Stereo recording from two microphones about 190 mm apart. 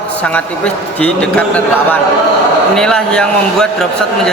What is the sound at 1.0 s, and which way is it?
Speech, 5° left (ahead or behind).